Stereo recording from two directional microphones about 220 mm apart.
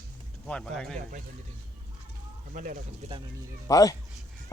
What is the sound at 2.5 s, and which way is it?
Speech, 35° right (ahead or behind).